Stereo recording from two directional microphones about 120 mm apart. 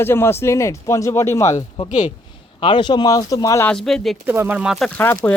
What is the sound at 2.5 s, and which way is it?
Speech, 40° left (ahead or behind).